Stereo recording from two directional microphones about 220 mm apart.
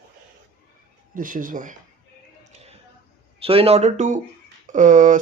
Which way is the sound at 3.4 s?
25° right (ahead or behind).